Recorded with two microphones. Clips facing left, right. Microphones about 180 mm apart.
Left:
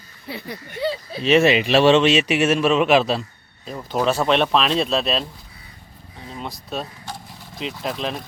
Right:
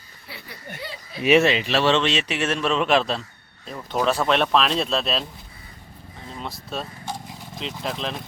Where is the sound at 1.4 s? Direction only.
15° left (ahead or behind).